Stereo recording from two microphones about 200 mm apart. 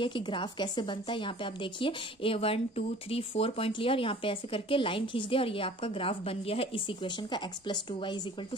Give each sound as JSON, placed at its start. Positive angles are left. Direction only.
{"t": 0.0, "sound": "a woman's voice", "side_deg": 25}